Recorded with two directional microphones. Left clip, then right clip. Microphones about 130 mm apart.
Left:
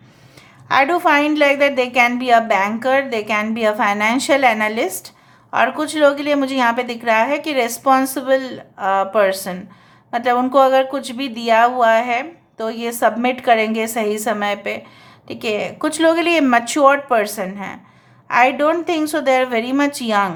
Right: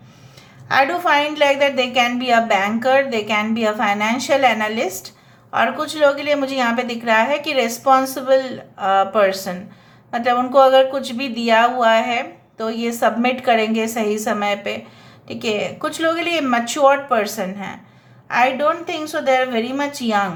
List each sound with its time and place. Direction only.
0.7 s a woman's voice: 35° left (ahead or behind)
15.9 s a woman's voice: 45° left (ahead or behind)